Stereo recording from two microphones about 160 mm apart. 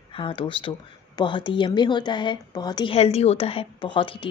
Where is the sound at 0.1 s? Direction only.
35° left (ahead or behind).